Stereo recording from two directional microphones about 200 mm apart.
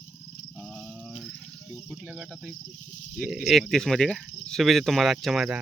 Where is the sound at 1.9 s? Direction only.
5° right (ahead or behind).